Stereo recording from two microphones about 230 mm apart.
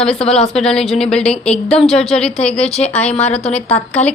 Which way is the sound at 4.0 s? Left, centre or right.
Left.